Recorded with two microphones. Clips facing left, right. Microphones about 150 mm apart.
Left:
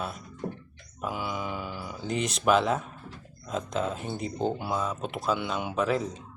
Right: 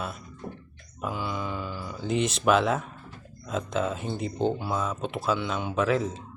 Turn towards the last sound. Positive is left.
turn(degrees=0)  # may be behind; listen again after turning